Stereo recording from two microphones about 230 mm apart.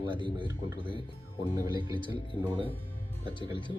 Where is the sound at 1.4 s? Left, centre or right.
Left.